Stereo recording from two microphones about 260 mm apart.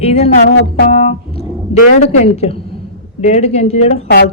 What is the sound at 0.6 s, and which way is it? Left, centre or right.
Music, left.